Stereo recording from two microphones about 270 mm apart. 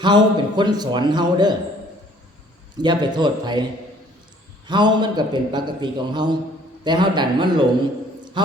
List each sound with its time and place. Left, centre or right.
0.0 s a man's voice: centre
2.7 s a man's voice: centre
4.6 s a man's voice: centre